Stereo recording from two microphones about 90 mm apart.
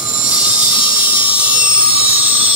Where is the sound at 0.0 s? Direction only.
10° right (ahead or behind).